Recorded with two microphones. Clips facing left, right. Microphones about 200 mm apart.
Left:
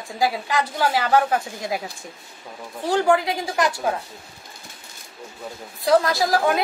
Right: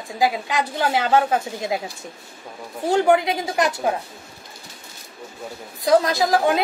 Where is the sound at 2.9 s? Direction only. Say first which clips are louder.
Right 2 dB; 20° right (ahead or behind).